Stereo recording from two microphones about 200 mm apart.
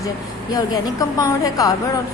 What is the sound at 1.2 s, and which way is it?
Speech, 15° left (ahead or behind).